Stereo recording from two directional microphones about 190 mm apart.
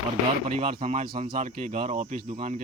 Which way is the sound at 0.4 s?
35° right (ahead or behind).